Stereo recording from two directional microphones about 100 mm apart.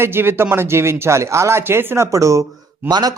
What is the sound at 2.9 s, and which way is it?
Speech, 45° right (ahead or behind).